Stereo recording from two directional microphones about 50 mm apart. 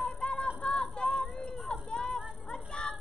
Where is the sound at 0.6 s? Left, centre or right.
Centre.